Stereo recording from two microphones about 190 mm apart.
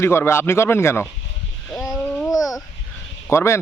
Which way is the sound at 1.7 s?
Centre (ahead or behind).